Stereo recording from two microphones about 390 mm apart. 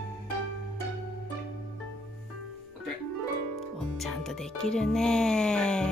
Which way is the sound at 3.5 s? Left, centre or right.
Centre.